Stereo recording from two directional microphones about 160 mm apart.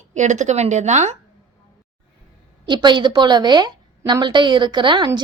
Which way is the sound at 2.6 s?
30° right (ahead or behind).